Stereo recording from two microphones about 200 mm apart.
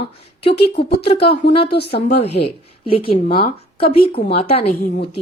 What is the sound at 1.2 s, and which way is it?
Speech, 30° left (ahead or behind).